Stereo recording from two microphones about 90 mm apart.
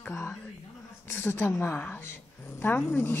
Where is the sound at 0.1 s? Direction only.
30° left (ahead or behind).